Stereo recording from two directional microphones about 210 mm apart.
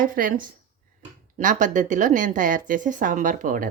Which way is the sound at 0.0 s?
40° right (ahead or behind).